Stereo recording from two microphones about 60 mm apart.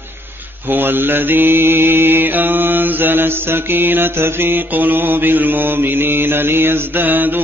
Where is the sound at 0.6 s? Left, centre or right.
Right.